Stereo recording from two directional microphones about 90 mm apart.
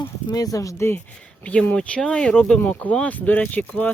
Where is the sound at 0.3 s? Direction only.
45° left (ahead or behind).